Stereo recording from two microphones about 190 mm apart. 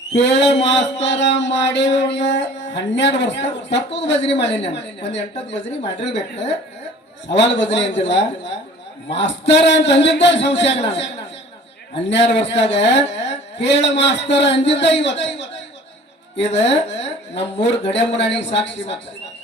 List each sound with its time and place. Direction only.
0.1 s a man's voice: 65° left (ahead or behind)
7.3 s a man's voice: 70° left (ahead or behind)
12.0 s a man's voice: 65° left (ahead or behind)